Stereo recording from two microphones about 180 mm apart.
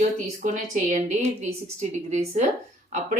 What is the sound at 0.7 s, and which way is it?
Speech, 45° right (ahead or behind).